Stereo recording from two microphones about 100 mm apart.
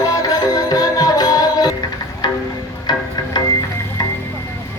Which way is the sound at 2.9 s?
40° left (ahead or behind).